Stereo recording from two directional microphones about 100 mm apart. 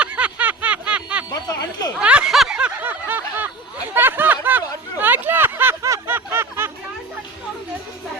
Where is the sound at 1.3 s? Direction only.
40° left (ahead or behind).